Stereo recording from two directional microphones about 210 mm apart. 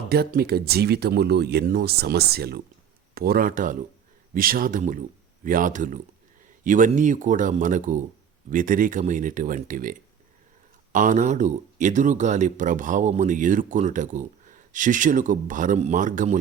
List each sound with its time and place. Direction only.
0.1 s speech: 45° right (ahead or behind)
10.9 s speech: 35° right (ahead or behind)